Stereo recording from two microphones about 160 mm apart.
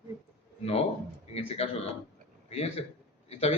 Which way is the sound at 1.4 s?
40° left (ahead or behind).